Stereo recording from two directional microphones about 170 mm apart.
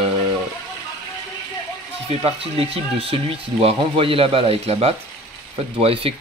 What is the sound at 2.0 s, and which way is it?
Speech, 35° right (ahead or behind).